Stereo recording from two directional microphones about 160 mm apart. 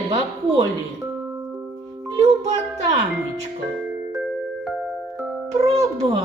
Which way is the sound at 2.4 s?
45° right (ahead or behind).